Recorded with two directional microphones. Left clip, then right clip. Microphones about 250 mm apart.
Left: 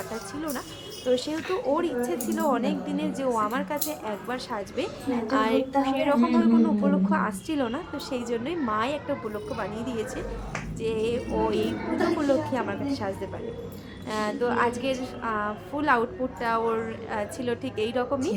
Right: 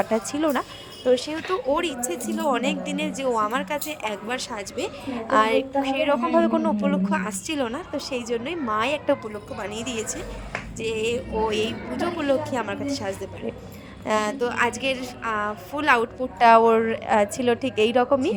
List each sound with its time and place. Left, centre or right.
0.3 s a woman's voice: right